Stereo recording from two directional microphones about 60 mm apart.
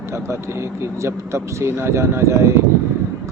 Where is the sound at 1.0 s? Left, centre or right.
Right.